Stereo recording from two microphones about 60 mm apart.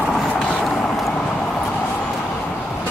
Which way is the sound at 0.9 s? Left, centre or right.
Centre.